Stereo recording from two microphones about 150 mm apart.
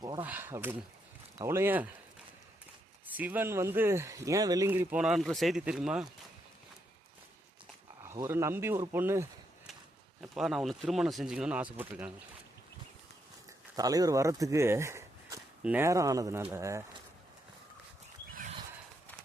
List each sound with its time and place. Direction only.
0.2 s speech: 15° right (ahead or behind)
3.2 s speech: 10° right (ahead or behind)
8.0 s speech: 20° right (ahead or behind)
10.2 s speech: centre (ahead or behind)
13.7 s speech: 25° right (ahead or behind)